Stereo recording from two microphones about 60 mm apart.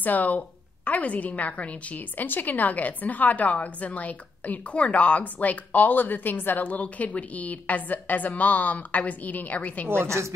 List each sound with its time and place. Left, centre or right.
0.0 s a woman's voice: left
9.8 s a woman's voice: right